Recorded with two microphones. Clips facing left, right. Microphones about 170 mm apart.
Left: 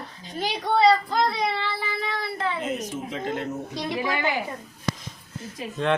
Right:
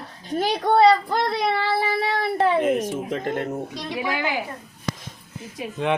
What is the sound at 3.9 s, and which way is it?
Speech, 5° right (ahead or behind).